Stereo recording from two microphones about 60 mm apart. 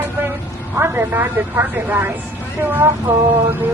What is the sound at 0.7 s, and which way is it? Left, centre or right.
Speech, right.